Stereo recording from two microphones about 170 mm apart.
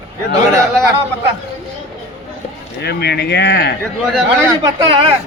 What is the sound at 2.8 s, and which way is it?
Speech, 75° left (ahead or behind).